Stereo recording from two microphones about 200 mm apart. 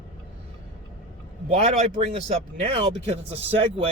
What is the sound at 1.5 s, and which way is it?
Speech, 35° right (ahead or behind).